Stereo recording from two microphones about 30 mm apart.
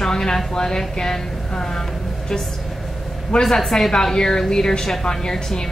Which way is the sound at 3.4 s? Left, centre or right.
Centre.